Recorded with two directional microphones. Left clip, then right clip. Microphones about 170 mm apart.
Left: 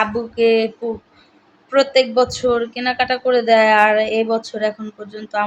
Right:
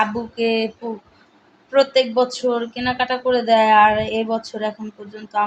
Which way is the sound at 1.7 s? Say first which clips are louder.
Left 2 dB; 20° left (ahead or behind).